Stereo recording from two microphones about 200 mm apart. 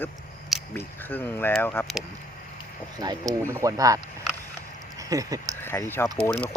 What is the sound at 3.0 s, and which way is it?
Speech, 20° right (ahead or behind).